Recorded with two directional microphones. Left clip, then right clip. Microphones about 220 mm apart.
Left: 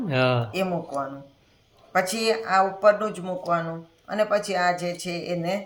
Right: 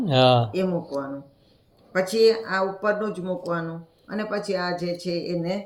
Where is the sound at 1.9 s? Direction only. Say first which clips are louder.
Right 4 dB; 50° left (ahead or behind).